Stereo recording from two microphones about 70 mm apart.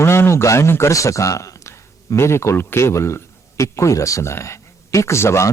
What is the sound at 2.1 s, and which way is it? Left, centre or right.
Speech, left.